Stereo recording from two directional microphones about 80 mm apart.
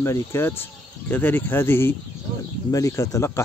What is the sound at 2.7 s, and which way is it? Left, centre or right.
Speech, left.